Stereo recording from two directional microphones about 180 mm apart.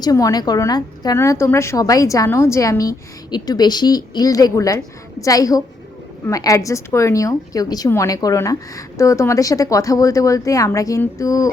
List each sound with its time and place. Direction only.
0.0 s a woman's voice: 20° left (ahead or behind)